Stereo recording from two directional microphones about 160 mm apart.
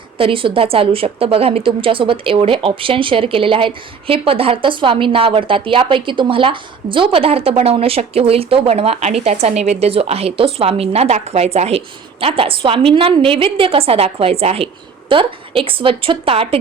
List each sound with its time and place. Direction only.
0.2 s a woman's voice: 35° right (ahead or behind)